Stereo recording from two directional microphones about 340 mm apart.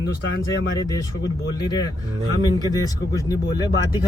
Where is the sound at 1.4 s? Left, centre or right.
Centre.